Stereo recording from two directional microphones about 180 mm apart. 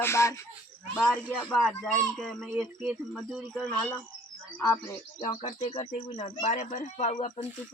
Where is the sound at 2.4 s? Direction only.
15° right (ahead or behind).